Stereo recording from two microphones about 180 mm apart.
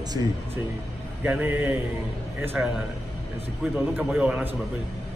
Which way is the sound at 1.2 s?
10° right (ahead or behind).